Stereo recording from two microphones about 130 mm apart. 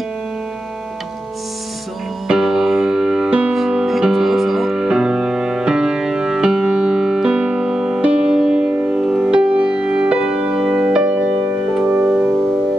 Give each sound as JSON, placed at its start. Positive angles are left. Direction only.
{"t": 2.2, "sound": "music", "side_deg": -5}